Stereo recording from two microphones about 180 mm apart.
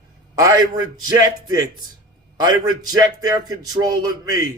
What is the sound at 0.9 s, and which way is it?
A man's voice, 20° right (ahead or behind).